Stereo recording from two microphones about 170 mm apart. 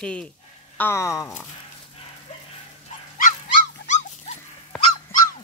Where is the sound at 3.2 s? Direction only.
45° left (ahead or behind).